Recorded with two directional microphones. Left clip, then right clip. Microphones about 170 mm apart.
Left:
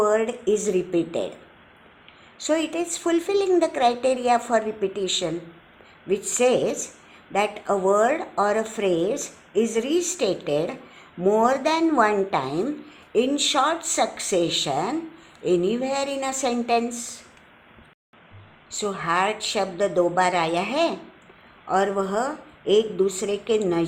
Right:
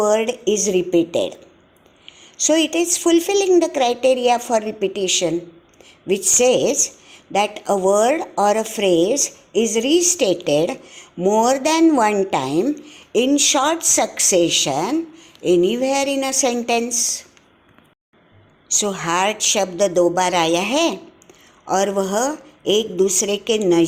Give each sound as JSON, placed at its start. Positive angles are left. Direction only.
{"t": 0.0, "sound": "a woman's voice", "side_deg": -35}
{"t": 2.5, "sound": "a woman's voice", "side_deg": -45}
{"t": 6.4, "sound": "a woman's voice", "side_deg": -40}
{"t": 18.8, "sound": "speech", "side_deg": -50}